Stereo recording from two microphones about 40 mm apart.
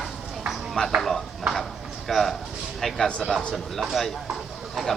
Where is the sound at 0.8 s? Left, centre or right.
Left.